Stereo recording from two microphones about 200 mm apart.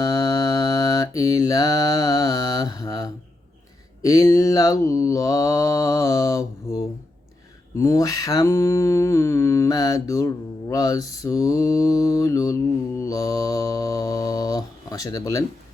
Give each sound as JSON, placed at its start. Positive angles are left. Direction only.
{"t": 0.0, "sound": "mantra", "side_deg": 20}